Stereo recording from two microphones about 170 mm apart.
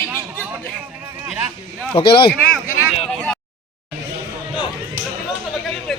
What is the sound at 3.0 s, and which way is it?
Speech, 5° left (ahead or behind).